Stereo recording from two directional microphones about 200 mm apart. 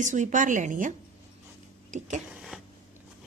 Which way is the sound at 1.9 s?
35° right (ahead or behind).